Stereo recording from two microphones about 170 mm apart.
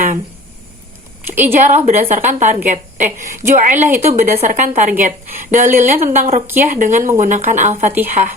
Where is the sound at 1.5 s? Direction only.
45° right (ahead or behind).